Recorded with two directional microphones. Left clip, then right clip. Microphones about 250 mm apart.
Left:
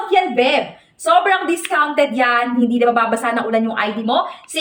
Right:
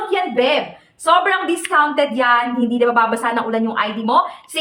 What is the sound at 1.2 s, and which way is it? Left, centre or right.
A woman's voice, centre.